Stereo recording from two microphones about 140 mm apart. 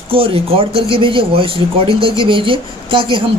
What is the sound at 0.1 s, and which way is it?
Speech, 40° right (ahead or behind).